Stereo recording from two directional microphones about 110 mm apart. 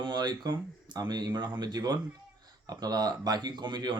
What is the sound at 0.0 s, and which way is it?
Speech, 40° right (ahead or behind).